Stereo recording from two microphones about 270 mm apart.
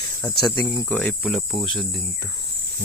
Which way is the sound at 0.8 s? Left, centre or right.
Centre.